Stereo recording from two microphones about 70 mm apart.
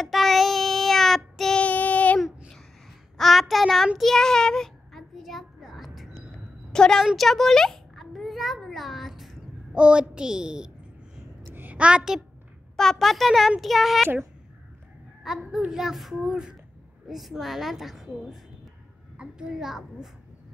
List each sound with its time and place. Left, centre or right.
0.0 s child singing: centre
1.6 s child singing: left
2.1 s a sound: centre
3.2 s child singing: centre
6.7 s a woman's voice: centre
7.2 s a sound: centre
9.8 s a woman's voice: centre
11.5 s a sound: right
12.7 s a woman's voice: centre
15.2 s a woman's voice: centre
19.1 s a child's voice: centre